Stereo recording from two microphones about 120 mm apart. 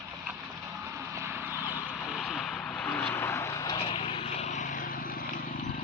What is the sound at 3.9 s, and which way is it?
Vehicle, 50° left (ahead or behind).